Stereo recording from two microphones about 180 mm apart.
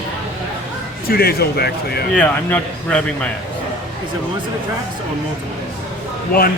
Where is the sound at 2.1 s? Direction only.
10° left (ahead or behind).